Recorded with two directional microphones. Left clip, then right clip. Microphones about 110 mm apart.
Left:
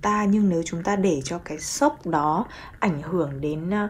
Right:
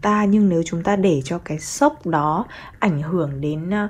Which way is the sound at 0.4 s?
5° left (ahead or behind).